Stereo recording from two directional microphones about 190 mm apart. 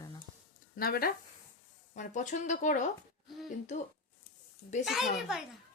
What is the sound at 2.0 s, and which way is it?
Speech, 40° left (ahead or behind).